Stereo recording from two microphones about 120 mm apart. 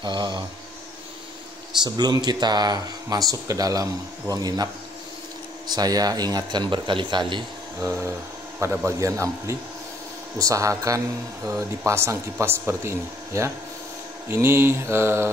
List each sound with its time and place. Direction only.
0.0 s a man's voice: 40° right (ahead or behind)
1.8 s a man's voice: 35° right (ahead or behind)
5.7 s a man's voice: 35° right (ahead or behind)
7.8 s speech: 20° right (ahead or behind)